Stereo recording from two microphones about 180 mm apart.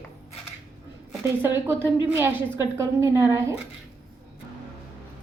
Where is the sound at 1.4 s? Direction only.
15° right (ahead or behind).